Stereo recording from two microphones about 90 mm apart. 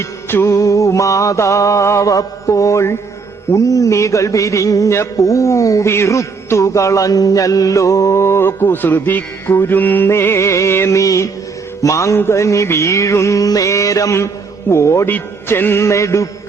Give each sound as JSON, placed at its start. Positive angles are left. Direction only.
{"t": 0.0, "sound": "a man's voice", "side_deg": 30}